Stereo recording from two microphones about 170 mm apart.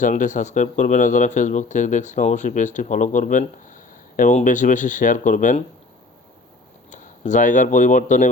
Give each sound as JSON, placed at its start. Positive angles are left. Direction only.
{"t": 0.0, "sound": "speech", "side_deg": 50}
{"t": 6.9, "sound": "speech", "side_deg": 45}